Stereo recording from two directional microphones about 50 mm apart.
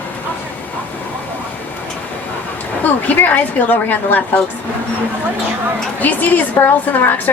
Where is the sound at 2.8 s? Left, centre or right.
Left.